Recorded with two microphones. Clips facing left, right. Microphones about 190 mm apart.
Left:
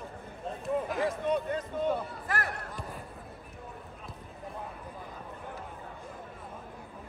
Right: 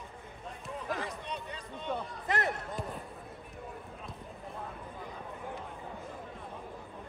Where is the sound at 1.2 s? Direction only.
50° left (ahead or behind).